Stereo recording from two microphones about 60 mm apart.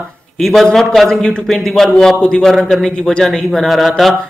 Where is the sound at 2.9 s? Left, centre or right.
Centre.